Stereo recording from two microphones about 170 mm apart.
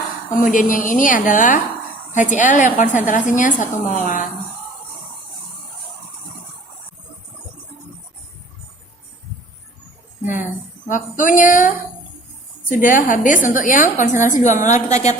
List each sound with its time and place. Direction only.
0.3 s a woman's voice: 50° left (ahead or behind)
10.8 s a woman's voice: 50° left (ahead or behind)